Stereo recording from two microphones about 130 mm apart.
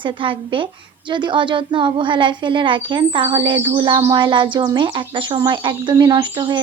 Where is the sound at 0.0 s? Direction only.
40° right (ahead or behind).